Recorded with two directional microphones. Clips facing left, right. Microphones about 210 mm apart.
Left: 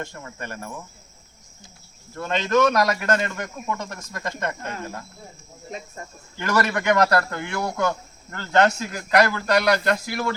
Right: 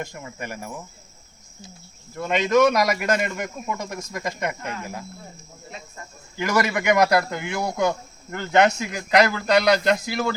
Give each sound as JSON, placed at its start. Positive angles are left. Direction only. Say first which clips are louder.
{"t": 0.0, "sound": "speech", "louder": "right 1 dB", "side_deg": -15}
{"t": 2.1, "sound": "speech", "louder": "right 2 dB", "side_deg": -15}
{"t": 6.4, "sound": "speech", "louder": "right 1 dB", "side_deg": -15}